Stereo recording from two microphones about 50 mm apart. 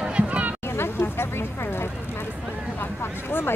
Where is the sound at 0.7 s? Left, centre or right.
Left.